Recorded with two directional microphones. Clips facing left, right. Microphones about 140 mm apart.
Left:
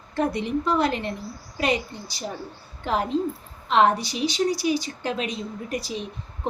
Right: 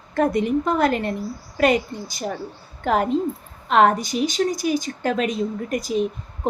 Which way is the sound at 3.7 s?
50° right (ahead or behind).